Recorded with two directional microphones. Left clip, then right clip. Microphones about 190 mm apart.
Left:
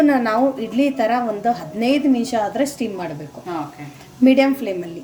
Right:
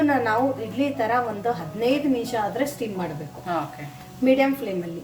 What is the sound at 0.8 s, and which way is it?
Speech, 50° left (ahead or behind).